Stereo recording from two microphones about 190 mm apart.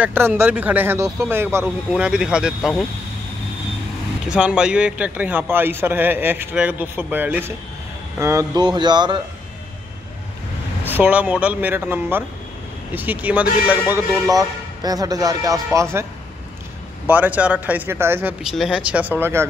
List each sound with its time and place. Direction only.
0.0 s a man's voice: 10° right (ahead or behind)
4.3 s a man's voice: 5° right (ahead or behind); by 9.2 s 25° right (ahead or behind)
10.9 s a man's voice: 10° right (ahead or behind)
17.1 s a man's voice: 10° right (ahead or behind)